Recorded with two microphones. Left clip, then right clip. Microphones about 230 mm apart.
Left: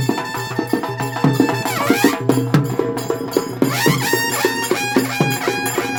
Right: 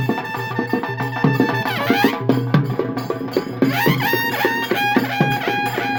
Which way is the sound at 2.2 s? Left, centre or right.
Centre.